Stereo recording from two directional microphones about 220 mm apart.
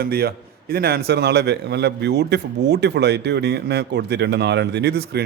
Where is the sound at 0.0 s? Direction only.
45° right (ahead or behind).